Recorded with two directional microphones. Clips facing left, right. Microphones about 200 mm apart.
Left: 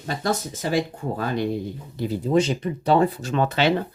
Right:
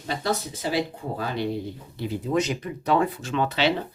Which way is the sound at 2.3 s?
30° left (ahead or behind).